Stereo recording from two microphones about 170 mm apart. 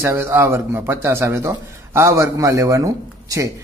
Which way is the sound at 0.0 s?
15° right (ahead or behind).